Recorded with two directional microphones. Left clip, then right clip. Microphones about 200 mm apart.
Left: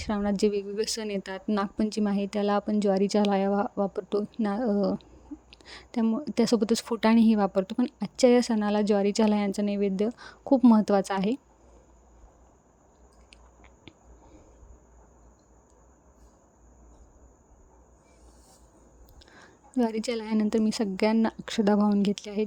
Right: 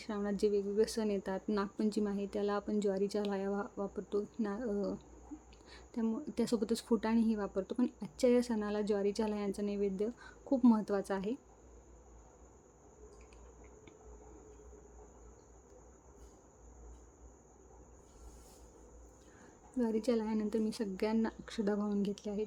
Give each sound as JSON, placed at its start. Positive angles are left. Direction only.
{"t": 0.0, "sound": "speech", "side_deg": 35}
{"t": 19.7, "sound": "speech", "side_deg": 40}